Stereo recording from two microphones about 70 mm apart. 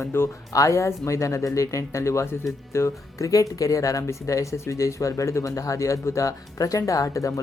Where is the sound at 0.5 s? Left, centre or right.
Left.